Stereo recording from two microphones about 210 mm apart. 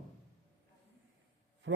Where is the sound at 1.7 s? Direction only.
60° right (ahead or behind).